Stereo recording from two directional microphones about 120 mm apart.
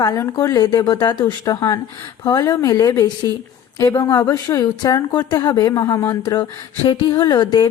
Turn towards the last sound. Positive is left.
turn(degrees=35)  # may be behind; listen again after turning